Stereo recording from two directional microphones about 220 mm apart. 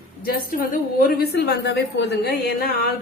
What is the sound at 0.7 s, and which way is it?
A woman's voice, 45° left (ahead or behind).